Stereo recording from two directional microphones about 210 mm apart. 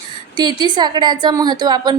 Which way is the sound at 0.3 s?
20° right (ahead or behind).